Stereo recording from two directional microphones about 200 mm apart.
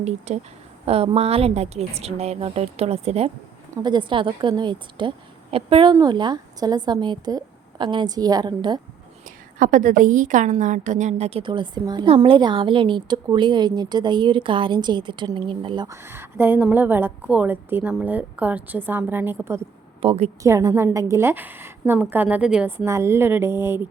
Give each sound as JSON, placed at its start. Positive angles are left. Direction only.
{"t": 0.3, "sound": "a woman's voice", "side_deg": -35}
{"t": 9.6, "sound": "a woman's voice", "side_deg": -40}
{"t": 20.0, "sound": "a woman's voice", "side_deg": -30}
{"t": 20.4, "sound": "speech", "side_deg": -15}